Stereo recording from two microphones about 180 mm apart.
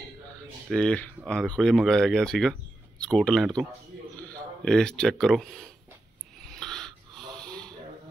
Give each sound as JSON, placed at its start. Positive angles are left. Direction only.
{"t": 0.7, "sound": "speech", "side_deg": 5}
{"t": 4.6, "sound": "speech", "side_deg": 5}
{"t": 6.4, "sound": "wheeze", "side_deg": 5}